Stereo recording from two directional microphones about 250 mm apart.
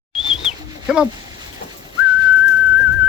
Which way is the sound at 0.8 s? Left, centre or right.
Centre.